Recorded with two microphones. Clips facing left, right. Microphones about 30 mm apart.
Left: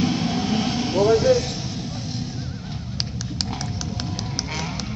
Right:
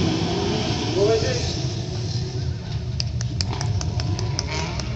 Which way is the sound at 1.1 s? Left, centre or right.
Right.